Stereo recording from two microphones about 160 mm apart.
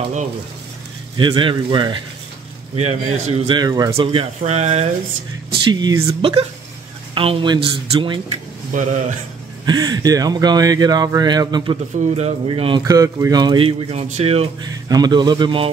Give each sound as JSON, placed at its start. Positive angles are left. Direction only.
{"t": 1.1, "sound": "speech", "side_deg": -30}
{"t": 2.7, "sound": "speech", "side_deg": -45}
{"t": 4.4, "sound": "speech", "side_deg": -45}
{"t": 5.5, "sound": "speech", "side_deg": -30}
{"t": 7.2, "sound": "speech", "side_deg": -35}
{"t": 8.7, "sound": "speech", "side_deg": -50}
{"t": 9.7, "sound": "speech", "side_deg": -25}
{"t": 12.0, "sound": "speech", "side_deg": -45}
{"t": 12.4, "sound": "speech", "side_deg": -30}
{"t": 12.8, "sound": "speech", "side_deg": -20}
{"t": 13.7, "sound": "speech", "side_deg": -40}
{"t": 14.6, "sound": "speech", "side_deg": -25}